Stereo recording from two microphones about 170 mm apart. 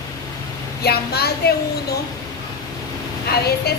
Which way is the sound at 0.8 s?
70° left (ahead or behind).